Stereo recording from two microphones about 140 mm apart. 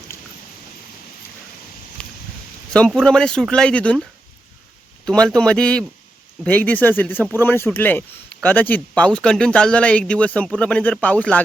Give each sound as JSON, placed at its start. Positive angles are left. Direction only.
{"t": 2.0, "sound": "a sound", "side_deg": 5}
{"t": 2.7, "sound": "speech", "side_deg": 5}
{"t": 5.0, "sound": "speech", "side_deg": 5}